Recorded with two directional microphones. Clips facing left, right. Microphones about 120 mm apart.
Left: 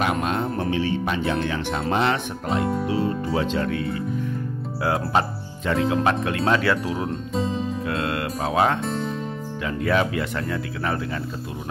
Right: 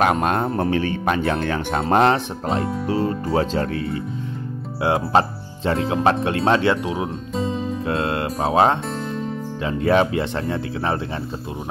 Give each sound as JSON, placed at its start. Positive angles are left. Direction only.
{"t": 0.0, "sound": "speech", "side_deg": -50}
{"t": 2.0, "sound": "speech", "side_deg": -30}
{"t": 4.8, "sound": "speech", "side_deg": -30}
{"t": 7.1, "sound": "music", "side_deg": 0}
{"t": 7.8, "sound": "speech", "side_deg": -30}